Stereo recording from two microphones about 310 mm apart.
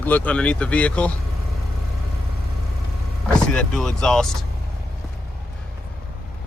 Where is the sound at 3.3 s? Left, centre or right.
Centre.